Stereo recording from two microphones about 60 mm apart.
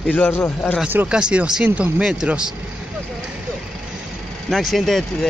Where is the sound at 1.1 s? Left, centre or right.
Centre.